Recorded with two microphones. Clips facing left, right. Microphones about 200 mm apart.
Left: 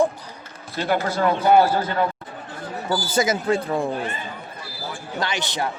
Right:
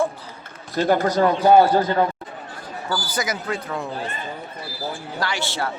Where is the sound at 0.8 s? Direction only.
40° right (ahead or behind).